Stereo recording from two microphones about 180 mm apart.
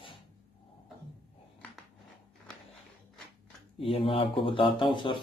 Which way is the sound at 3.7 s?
30° left (ahead or behind).